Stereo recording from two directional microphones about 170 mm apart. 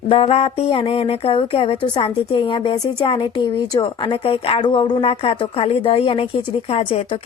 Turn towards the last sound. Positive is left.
turn(degrees=35)  # may be behind; listen again after turning